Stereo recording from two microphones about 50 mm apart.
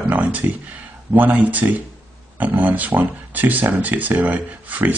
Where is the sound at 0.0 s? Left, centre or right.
Right.